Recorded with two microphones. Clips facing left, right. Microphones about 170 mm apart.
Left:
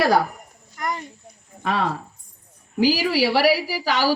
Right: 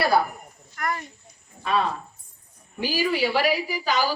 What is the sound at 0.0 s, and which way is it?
Speech, 90° left.